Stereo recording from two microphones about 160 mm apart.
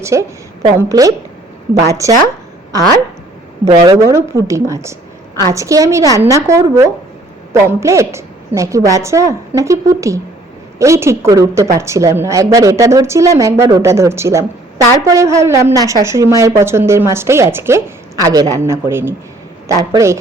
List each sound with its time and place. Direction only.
0.0 s a woman's voice: 20° right (ahead or behind)
3.7 s a woman's voice: 20° right (ahead or behind)